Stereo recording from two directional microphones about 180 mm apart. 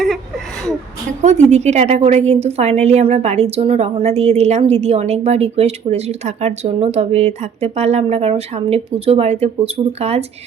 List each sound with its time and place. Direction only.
1.2 s a woman's voice: 40° right (ahead or behind)